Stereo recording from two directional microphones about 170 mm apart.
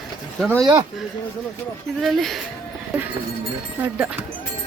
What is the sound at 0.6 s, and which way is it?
Speech, 20° right (ahead or behind).